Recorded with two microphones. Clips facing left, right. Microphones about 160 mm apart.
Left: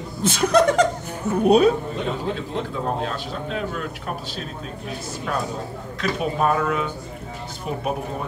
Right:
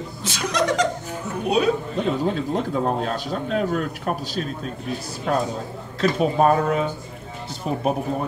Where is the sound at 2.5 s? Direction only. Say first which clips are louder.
Right 3 dB; 45° right (ahead or behind).